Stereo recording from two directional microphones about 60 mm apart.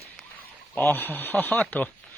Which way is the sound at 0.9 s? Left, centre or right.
Left.